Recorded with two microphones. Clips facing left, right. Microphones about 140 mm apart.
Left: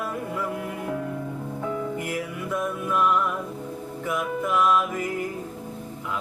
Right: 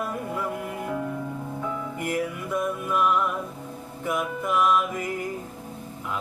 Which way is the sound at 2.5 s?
5° right (ahead or behind).